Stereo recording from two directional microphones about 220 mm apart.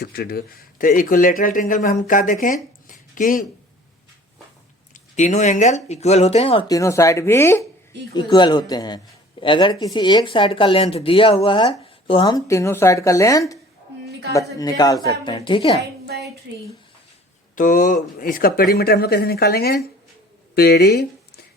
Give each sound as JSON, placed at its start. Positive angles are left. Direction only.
{"t": 0.0, "sound": "speech", "side_deg": 45}
{"t": 4.9, "sound": "speech", "side_deg": 30}
{"t": 16.0, "sound": "a sound", "side_deg": -45}
{"t": 17.5, "sound": "speech", "side_deg": 35}